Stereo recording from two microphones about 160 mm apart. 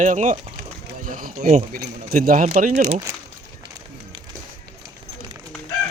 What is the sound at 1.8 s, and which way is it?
Chicken, 70° right (ahead or behind).